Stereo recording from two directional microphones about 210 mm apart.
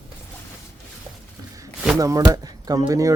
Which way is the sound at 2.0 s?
15° right (ahead or behind).